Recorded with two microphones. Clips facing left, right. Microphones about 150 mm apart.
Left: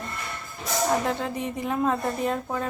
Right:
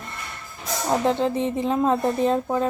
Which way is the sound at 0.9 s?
25° right (ahead or behind).